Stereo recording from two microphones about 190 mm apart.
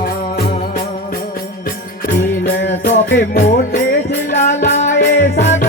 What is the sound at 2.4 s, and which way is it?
Music, 65° left (ahead or behind).